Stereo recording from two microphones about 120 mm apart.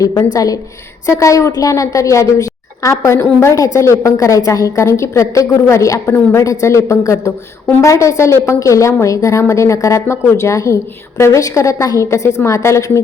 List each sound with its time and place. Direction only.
0.0 s a woman's voice: 25° left (ahead or behind)